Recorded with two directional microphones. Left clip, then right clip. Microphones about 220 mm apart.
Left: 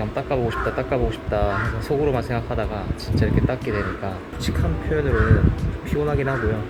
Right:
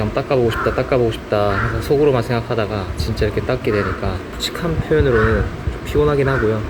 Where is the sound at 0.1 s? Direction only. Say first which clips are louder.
Right 8 dB; centre (ahead or behind).